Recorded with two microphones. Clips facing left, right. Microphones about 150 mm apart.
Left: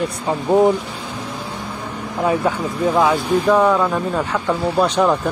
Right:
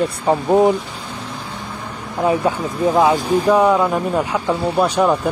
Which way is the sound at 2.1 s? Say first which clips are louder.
Right 1 dB; 15° right (ahead or behind).